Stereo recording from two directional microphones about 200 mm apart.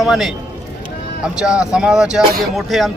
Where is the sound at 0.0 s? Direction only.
Centre (ahead or behind).